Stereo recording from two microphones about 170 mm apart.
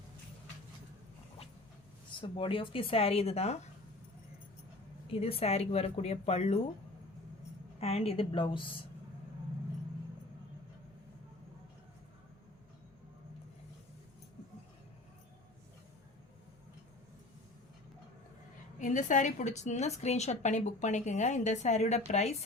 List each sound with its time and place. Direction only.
2.2 s speech: 30° left (ahead or behind)
5.0 s speech: 35° left (ahead or behind)
7.8 s speech: 35° left (ahead or behind)
18.8 s a woman's voice: 45° left (ahead or behind)